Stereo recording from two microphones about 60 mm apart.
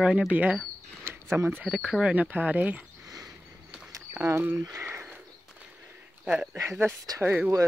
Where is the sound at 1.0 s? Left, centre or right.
Right.